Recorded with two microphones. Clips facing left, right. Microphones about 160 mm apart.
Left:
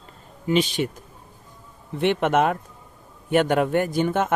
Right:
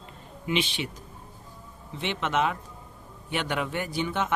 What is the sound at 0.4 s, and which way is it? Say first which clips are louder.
Speech: left 7 dB; 40° left (ahead or behind).